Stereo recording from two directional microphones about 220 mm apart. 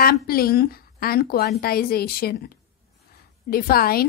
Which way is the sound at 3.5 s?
45° left (ahead or behind).